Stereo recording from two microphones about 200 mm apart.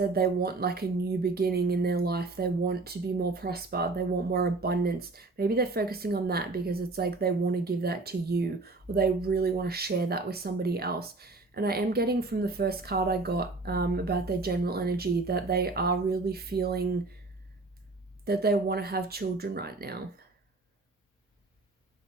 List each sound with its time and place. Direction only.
0.0 s speech: 50° right (ahead or behind)
18.3 s speech: 50° right (ahead or behind)